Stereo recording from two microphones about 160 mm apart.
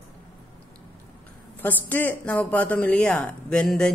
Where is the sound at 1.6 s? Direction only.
10° left (ahead or behind).